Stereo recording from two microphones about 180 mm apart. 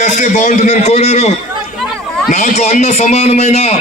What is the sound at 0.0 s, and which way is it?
A man's voice, 40° left (ahead or behind).